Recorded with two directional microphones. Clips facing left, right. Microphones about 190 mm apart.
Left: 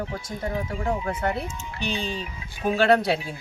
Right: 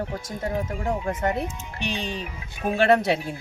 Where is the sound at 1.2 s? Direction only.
20° right (ahead or behind).